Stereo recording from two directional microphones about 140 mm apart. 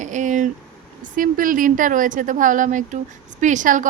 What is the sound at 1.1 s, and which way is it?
A woman's voice, 80° right.